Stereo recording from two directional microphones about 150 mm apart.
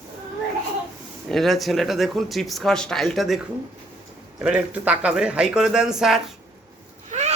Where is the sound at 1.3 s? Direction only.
Centre (ahead or behind).